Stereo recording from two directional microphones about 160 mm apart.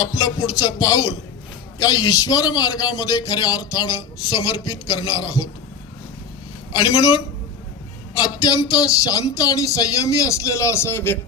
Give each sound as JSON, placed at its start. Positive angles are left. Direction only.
{"t": 0.0, "sound": "a man's voice", "side_deg": 20}
{"t": 6.7, "sound": "a man's voice", "side_deg": 25}